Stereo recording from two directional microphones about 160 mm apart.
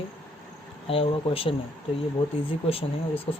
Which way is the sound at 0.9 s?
35° left (ahead or behind).